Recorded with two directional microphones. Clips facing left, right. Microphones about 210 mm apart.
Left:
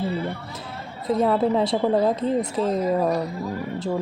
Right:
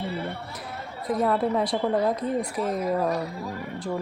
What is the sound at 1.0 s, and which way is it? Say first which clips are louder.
A woman's voice: left 4 dB; 25° left (ahead or behind).